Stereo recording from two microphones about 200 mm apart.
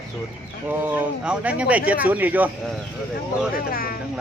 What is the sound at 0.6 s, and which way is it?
Speech, 10° right (ahead or behind).